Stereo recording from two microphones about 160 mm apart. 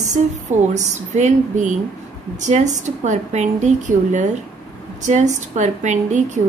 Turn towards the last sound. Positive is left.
turn(degrees=-50)  # may be behind; listen again after turning